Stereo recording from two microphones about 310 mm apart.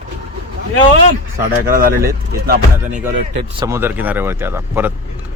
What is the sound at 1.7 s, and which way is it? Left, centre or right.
Speech, right.